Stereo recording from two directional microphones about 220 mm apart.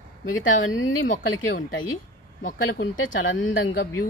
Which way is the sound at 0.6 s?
60° left (ahead or behind).